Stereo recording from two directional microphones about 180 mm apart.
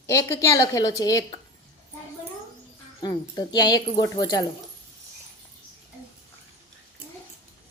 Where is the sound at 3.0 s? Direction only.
20° left (ahead or behind).